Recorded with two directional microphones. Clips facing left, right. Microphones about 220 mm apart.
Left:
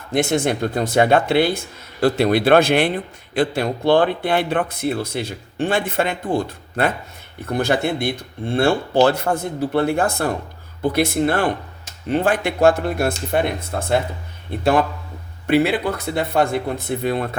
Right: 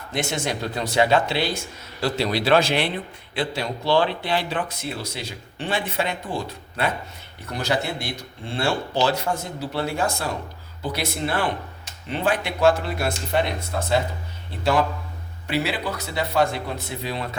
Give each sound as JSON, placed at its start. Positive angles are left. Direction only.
{"t": 0.1, "sound": "a man's voice", "side_deg": 55}